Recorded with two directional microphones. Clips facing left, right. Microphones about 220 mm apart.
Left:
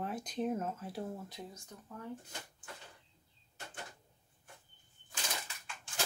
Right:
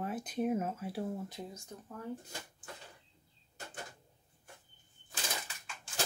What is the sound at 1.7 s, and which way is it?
Speech, 25° right (ahead or behind).